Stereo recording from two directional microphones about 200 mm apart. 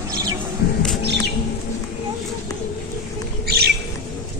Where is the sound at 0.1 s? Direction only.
20° right (ahead or behind).